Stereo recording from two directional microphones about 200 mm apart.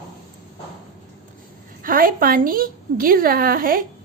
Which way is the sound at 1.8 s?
45° right (ahead or behind).